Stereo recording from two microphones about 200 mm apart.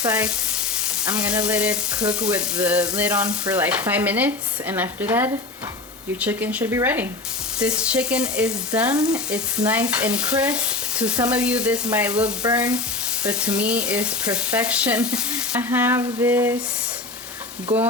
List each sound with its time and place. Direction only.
0.0 s frying: 5° right (ahead or behind)
3.5 s speech: 5° right (ahead or behind)
7.6 s frying: 5° right (ahead or behind)
16.0 s speech: 15° right (ahead or behind)
17.7 s stir: 30° right (ahead or behind)